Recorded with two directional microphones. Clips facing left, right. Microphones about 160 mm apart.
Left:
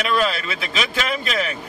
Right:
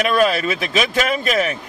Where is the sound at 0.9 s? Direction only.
45° right (ahead or behind).